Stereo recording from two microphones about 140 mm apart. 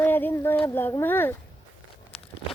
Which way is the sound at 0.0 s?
15° left (ahead or behind).